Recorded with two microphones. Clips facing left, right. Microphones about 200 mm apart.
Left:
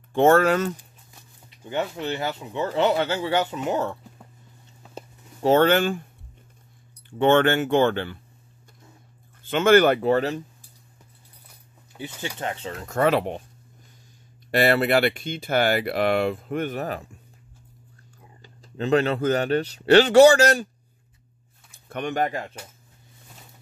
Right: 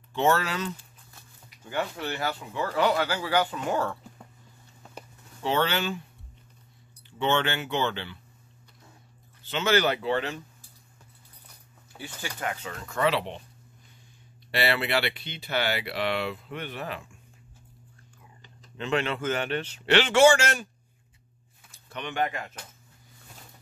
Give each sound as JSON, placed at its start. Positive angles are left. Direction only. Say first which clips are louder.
{"t": 0.1, "sound": "speech", "louder": "left 8 dB", "side_deg": 50}
{"t": 1.5, "sound": "speech", "louder": "left 4 dB", "side_deg": 20}
{"t": 5.4, "sound": "speech", "louder": "left 9 dB", "side_deg": 45}
{"t": 7.1, "sound": "speech", "louder": "left 8 dB", "side_deg": 50}
{"t": 9.4, "sound": "speech", "louder": "left 8 dB", "side_deg": 50}
{"t": 12.2, "sound": "speech", "louder": "left 3 dB", "side_deg": 25}
{"t": 14.5, "sound": "speech", "louder": "left 7 dB", "side_deg": 45}
{"t": 18.4, "sound": "speech", "louder": "left 8 dB", "side_deg": 35}
{"t": 21.7, "sound": "speech", "louder": "left 5 dB", "side_deg": 50}